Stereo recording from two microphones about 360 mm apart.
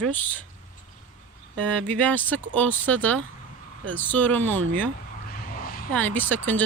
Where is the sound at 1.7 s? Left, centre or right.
Centre.